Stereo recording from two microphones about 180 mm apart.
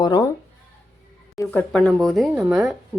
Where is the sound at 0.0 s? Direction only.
20° left (ahead or behind).